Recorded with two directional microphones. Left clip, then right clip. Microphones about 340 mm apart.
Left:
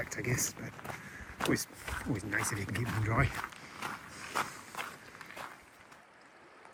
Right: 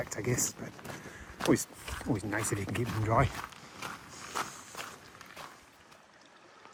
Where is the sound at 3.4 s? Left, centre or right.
Centre.